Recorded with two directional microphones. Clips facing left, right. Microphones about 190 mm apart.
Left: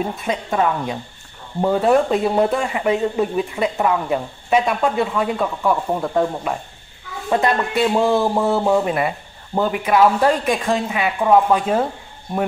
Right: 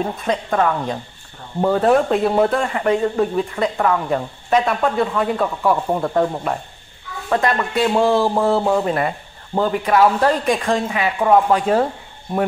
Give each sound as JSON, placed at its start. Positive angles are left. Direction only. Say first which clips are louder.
{"t": 0.2, "sound": "speech", "louder": "right 2 dB", "side_deg": 10}
{"t": 7.2, "sound": "speech", "louder": "even", "side_deg": 15}
{"t": 7.9, "sound": "speech", "louder": "right 2 dB", "side_deg": 0}